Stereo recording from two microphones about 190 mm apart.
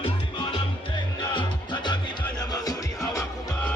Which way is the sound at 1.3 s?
25° left (ahead or behind).